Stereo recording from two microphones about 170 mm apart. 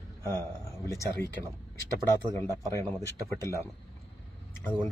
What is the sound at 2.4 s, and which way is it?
Speech, 20° left (ahead or behind).